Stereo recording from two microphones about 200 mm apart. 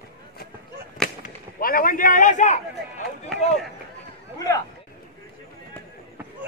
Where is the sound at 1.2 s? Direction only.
45° left (ahead or behind).